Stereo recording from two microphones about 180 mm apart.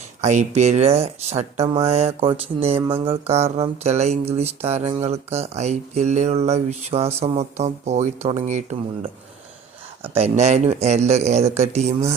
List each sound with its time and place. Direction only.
0.2 s speech: 40° right (ahead or behind)
10.0 s speech: 35° right (ahead or behind)